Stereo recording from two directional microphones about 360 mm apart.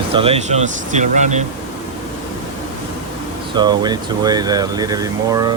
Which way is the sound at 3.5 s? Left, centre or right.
Centre.